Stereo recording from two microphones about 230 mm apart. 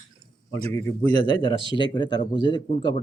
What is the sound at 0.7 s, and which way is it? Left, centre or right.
Speech, centre.